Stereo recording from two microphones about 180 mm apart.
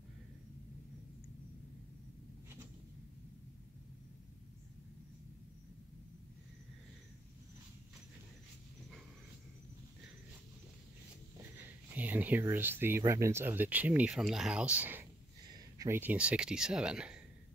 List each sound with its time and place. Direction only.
11.5 s speech: 10° right (ahead or behind)